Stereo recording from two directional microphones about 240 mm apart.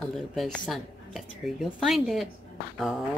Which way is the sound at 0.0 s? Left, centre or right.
Centre.